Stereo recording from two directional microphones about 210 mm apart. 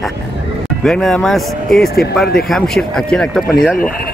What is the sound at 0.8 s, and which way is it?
Speech, 5° left (ahead or behind).